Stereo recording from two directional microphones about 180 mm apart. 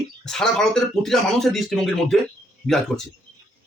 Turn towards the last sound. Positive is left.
turn(degrees=0)  # may be behind; listen again after turning